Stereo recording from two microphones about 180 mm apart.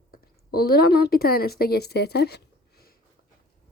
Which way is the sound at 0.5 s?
60° left (ahead or behind).